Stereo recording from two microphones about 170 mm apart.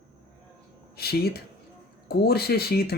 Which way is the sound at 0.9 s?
65° left (ahead or behind).